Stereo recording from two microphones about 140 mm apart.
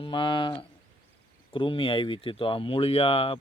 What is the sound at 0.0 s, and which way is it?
Speech, 35° left (ahead or behind).